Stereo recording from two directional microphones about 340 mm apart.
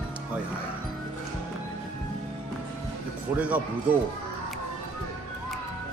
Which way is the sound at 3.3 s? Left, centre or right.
Centre.